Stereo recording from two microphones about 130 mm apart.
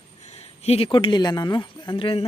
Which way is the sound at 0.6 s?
50° left (ahead or behind).